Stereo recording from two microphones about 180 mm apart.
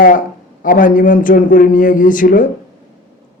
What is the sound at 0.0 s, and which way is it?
A man's voice, 50° left (ahead or behind).